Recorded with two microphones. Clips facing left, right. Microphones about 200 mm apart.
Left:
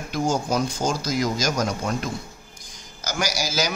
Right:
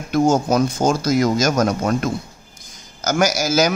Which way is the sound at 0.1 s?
55° right (ahead or behind).